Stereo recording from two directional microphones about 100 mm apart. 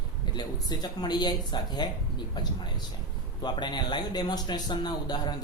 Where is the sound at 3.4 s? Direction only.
45° left (ahead or behind).